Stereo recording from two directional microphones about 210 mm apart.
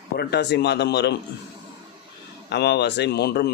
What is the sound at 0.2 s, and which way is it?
Speech, 50° left (ahead or behind).